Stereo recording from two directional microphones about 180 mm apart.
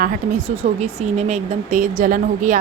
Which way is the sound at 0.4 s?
35° right (ahead or behind).